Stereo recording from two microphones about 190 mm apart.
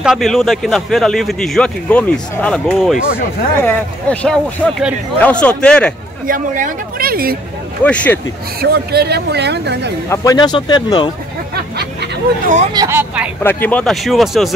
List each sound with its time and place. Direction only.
0.0 s speech: centre (ahead or behind)
6.2 s speech: 45° right (ahead or behind)
7.8 s speech: 5° left (ahead or behind)
8.5 s speech: 55° right (ahead or behind)
10.0 s speech: 15° left (ahead or behind)
11.5 s a sound: 60° right (ahead or behind)
12.7 s speech: 15° right (ahead or behind)
13.4 s speech: 10° left (ahead or behind)